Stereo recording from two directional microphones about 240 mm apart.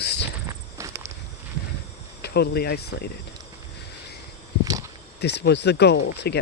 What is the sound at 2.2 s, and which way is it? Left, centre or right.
Speech, left.